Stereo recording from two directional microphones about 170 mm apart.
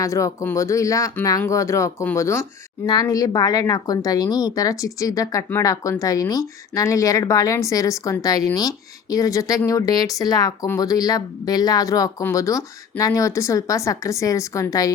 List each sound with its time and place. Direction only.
0.0 s speech: 20° left (ahead or behind)